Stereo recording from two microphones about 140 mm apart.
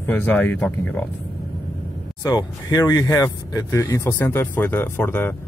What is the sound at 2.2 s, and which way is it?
Speech, 25° left (ahead or behind).